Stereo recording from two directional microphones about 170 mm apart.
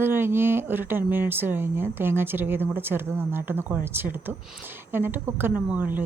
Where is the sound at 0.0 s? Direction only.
15° right (ahead or behind).